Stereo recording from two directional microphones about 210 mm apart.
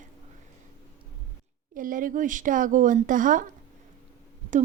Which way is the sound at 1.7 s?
40° right (ahead or behind).